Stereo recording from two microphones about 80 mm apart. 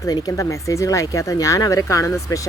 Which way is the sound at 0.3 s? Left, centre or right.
Left.